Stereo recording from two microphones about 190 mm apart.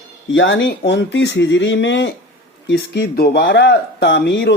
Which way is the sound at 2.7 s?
60° left (ahead or behind).